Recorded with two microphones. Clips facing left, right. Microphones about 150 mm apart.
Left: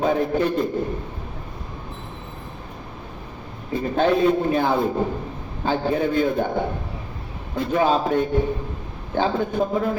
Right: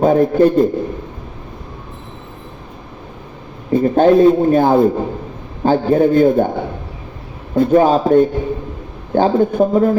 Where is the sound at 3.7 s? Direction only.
45° right (ahead or behind).